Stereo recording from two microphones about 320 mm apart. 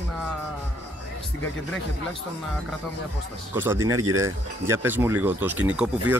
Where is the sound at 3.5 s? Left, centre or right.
Centre.